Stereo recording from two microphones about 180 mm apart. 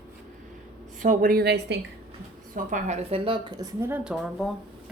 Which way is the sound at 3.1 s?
30° right (ahead or behind).